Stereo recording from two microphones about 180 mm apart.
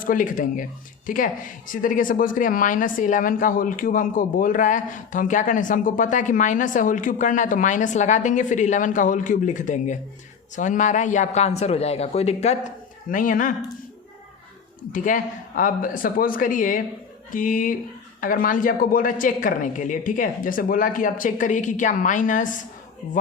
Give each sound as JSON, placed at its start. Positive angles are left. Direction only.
{"t": 0.0, "sound": "speech", "side_deg": 50}
{"t": 13.1, "sound": "speech", "side_deg": 50}
{"t": 14.9, "sound": "speech", "side_deg": 45}